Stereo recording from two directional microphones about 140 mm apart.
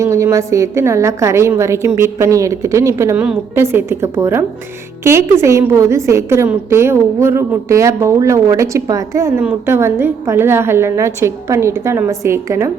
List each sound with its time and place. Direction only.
0.0 s a woman's voice: 20° right (ahead or behind)